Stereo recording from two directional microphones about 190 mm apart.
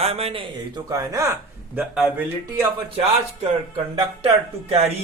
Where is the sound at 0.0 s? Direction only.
30° right (ahead or behind).